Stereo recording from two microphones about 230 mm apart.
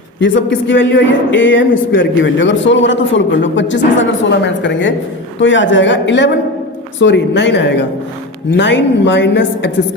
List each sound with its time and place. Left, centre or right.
0.7 s a man's voice: left